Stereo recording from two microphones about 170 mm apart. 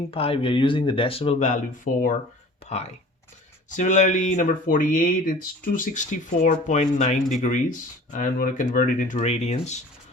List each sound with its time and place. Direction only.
0.1 s speech: 35° left (ahead or behind)